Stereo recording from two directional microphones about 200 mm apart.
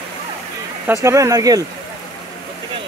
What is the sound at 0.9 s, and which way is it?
Speech, 15° right (ahead or behind).